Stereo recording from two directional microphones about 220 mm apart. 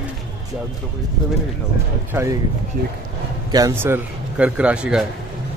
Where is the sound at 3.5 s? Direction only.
15° right (ahead or behind).